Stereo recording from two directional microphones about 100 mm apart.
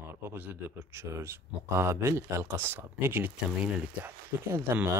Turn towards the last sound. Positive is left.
turn(degrees=-25)  # may be behind; listen again after turning